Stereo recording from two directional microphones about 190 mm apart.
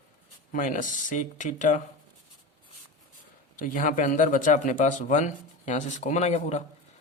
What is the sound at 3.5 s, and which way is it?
A man's voice, 45° left (ahead or behind).